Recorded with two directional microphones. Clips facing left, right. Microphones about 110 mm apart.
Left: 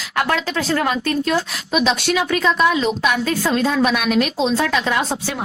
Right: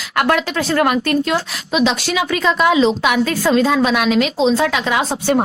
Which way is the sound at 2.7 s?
90° right.